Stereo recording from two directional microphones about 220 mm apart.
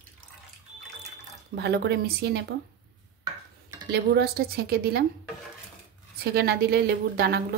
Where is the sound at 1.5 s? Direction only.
50° right (ahead or behind).